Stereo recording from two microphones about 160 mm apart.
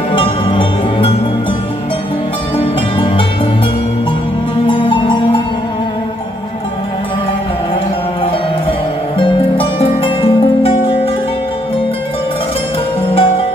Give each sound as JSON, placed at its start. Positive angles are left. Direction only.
{"t": 0.1, "sound": "music", "side_deg": 35}
{"t": 2.5, "sound": "music", "side_deg": 35}
{"t": 4.6, "sound": "music", "side_deg": 30}
{"t": 9.2, "sound": "music", "side_deg": 35}
{"t": 13.0, "sound": "music", "side_deg": 35}